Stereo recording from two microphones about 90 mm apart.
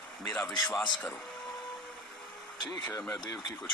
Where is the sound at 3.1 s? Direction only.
45° left (ahead or behind).